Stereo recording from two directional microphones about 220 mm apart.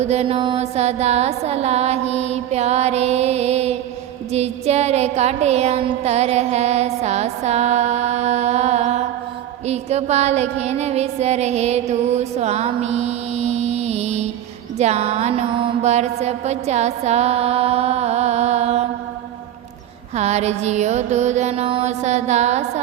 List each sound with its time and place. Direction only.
0.0 s music: 30° right (ahead or behind)
20.1 s mantra: 30° right (ahead or behind)